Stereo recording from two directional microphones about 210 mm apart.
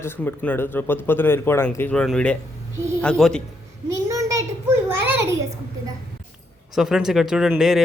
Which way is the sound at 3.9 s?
15° right (ahead or behind).